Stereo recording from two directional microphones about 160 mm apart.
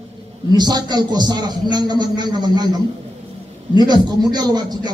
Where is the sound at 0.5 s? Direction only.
25° right (ahead or behind).